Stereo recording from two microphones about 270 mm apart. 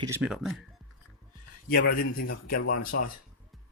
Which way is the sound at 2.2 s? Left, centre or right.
Left.